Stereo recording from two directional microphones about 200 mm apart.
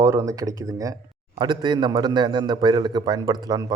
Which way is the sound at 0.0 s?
15° right (ahead or behind).